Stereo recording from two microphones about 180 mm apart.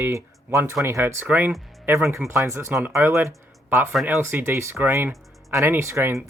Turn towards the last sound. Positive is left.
turn(degrees=-15)  # may be behind; listen again after turning